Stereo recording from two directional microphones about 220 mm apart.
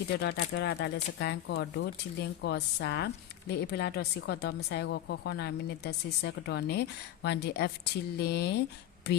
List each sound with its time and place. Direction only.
0.2 s a woman's voice: 50° left (ahead or behind)